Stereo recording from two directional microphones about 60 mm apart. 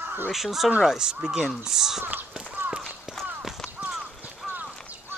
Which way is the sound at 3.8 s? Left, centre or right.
Right.